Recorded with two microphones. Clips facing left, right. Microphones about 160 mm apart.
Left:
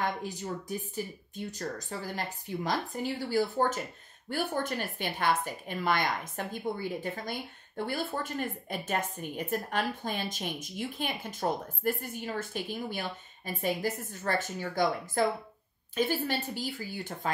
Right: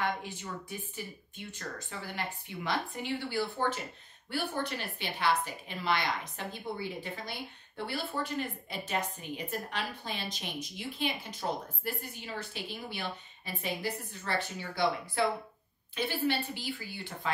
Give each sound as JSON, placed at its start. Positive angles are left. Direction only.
{"t": 0.0, "sound": "speech", "side_deg": 40}